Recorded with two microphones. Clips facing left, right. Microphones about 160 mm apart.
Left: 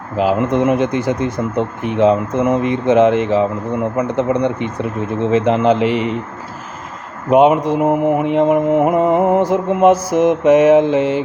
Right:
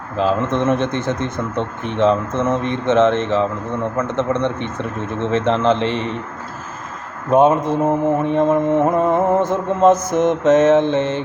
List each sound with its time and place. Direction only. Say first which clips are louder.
0.2 s speech: left 3 dB; 15° left (ahead or behind)
7.3 s speech: left 2 dB; 15° left (ahead or behind)